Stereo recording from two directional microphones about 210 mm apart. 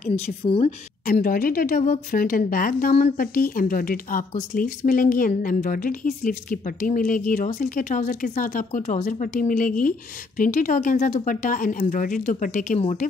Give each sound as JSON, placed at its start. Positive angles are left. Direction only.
{"t": 0.0, "sound": "a woman's voice", "side_deg": 30}
{"t": 1.0, "sound": "a woman's voice", "side_deg": 40}